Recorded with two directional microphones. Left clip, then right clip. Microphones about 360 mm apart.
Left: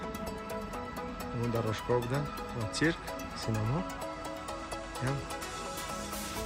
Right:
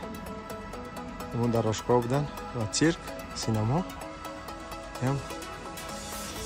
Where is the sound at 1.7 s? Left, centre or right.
Centre.